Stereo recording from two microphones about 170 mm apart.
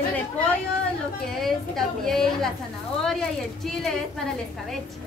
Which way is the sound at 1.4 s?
Centre (ahead or behind).